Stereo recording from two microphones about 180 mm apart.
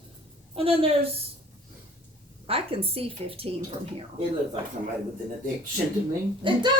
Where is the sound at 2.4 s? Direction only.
30° right (ahead or behind).